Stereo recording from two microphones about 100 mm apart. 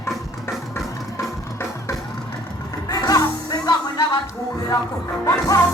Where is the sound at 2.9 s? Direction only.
40° left (ahead or behind).